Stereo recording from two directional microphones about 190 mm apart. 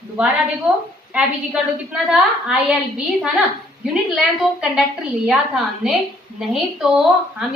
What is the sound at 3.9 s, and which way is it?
A woman's voice, 5° right (ahead or behind).